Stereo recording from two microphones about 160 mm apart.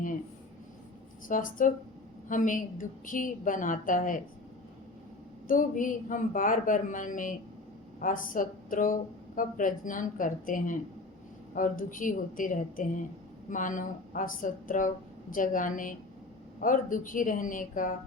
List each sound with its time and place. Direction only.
1.3 s speech: 55° left (ahead or behind)
5.5 s speech: 55° left (ahead or behind)